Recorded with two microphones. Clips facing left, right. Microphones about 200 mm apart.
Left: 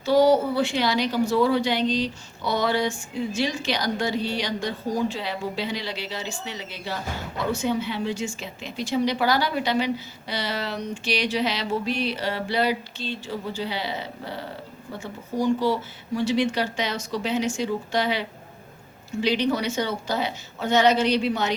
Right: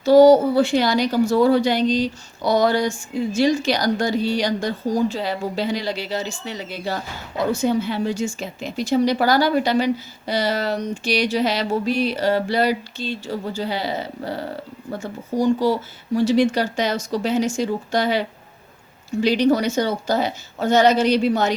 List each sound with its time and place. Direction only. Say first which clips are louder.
0.0 s a woman's voice: right 7 dB; 40° right (ahead or behind)